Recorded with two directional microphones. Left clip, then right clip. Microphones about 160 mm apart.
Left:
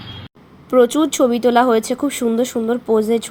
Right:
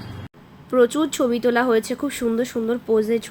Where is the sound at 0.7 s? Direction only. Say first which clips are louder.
Left 4 dB; 15° left (ahead or behind).